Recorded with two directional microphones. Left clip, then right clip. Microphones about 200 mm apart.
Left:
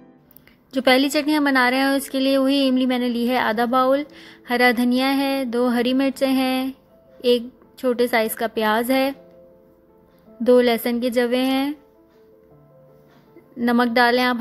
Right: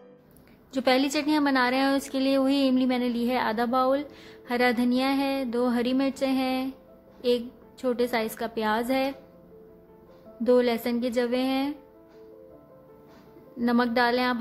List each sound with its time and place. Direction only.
0.7 s a woman's voice: 25° left (ahead or behind)
10.4 s a woman's voice: 30° left (ahead or behind)
13.6 s a woman's voice: 30° left (ahead or behind)